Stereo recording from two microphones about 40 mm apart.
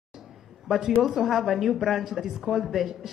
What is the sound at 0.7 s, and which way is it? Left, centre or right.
A woman's voice, centre.